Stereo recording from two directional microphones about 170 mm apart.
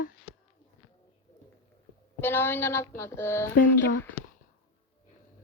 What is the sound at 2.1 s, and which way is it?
A woman's voice, 15° left (ahead or behind).